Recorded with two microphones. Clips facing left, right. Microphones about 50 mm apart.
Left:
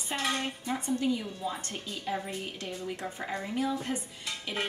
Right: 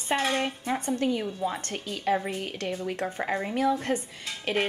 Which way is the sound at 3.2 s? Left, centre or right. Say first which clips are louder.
Right 5 dB; right.